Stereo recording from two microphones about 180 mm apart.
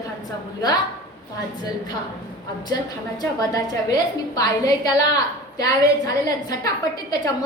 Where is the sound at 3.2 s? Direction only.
20° left (ahead or behind).